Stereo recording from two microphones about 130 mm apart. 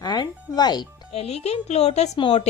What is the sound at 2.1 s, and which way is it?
Speech, 40° left (ahead or behind).